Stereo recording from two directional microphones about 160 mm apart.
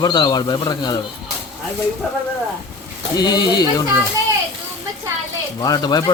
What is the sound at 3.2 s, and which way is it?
Speech, 25° left (ahead or behind).